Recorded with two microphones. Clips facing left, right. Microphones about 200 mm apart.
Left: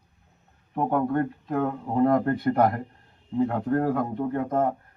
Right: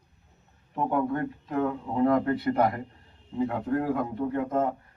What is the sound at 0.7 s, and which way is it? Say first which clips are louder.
Speech: left 3 dB; 50° left (ahead or behind).